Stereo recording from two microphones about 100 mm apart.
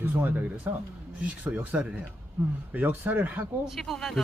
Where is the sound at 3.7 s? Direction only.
Centre (ahead or behind).